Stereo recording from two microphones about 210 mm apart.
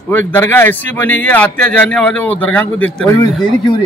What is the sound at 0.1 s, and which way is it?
Speech, 10° left (ahead or behind).